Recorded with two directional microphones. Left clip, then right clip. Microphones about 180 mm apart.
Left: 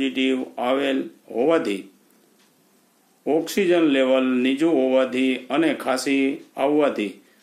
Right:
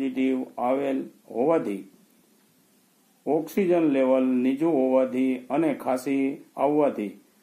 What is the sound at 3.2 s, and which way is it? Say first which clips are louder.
Speech: left 4 dB; 15° left (ahead or behind).